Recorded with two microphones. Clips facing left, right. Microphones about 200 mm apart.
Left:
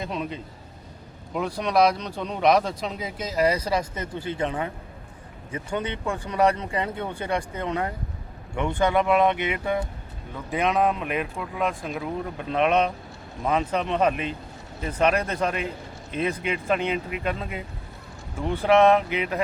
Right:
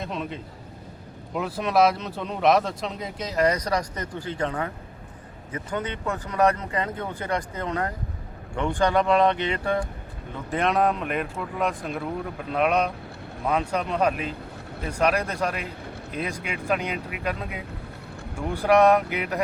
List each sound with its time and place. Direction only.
0.0 s speech: centre (ahead or behind)
3.7 s speech: 25° left (ahead or behind)
10.5 s speech: centre (ahead or behind)
18.6 s speech: centre (ahead or behind)